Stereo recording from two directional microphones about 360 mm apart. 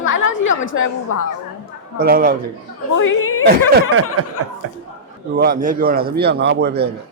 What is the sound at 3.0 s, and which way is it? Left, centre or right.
Speech, left.